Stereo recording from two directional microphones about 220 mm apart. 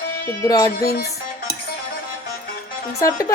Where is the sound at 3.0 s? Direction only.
15° left (ahead or behind).